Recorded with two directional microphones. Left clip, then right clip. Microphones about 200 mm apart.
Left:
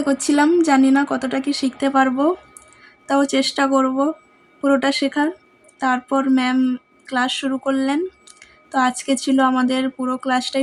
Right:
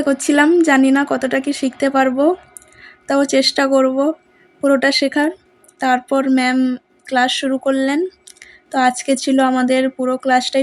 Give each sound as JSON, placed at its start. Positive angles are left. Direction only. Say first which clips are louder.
{"t": 0.0, "sound": "speech", "louder": "right 3 dB", "side_deg": -15}